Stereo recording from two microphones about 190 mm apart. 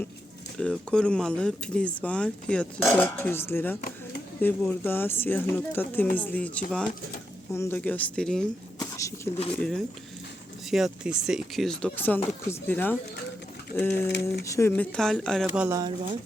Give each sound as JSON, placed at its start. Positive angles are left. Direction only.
{"t": 0.6, "sound": "speech", "side_deg": 5}
{"t": 9.0, "sound": "a sound", "side_deg": 15}
{"t": 9.6, "sound": "speech", "side_deg": 0}
{"t": 14.1, "sound": "speech", "side_deg": 60}
{"t": 14.4, "sound": "speech", "side_deg": 15}
{"t": 14.7, "sound": "speech", "side_deg": 5}
{"t": 15.4, "sound": "speech", "side_deg": -10}